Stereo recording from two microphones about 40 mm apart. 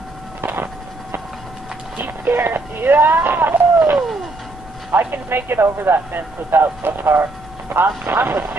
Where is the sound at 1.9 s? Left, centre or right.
Right.